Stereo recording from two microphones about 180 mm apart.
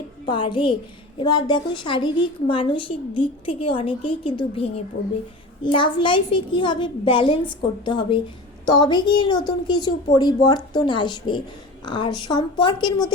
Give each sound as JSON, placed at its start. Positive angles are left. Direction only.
{"t": 0.3, "sound": "a woman's voice", "side_deg": 25}